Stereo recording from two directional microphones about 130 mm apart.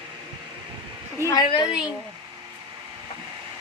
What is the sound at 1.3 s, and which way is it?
Speech, 30° left (ahead or behind).